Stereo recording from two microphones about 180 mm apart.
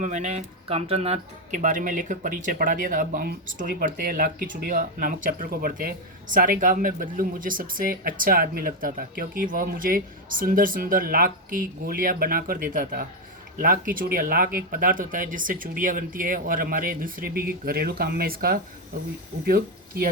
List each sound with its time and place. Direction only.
0.0 s speech: 40° right (ahead or behind)